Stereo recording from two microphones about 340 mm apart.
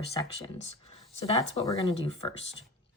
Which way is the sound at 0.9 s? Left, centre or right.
Centre.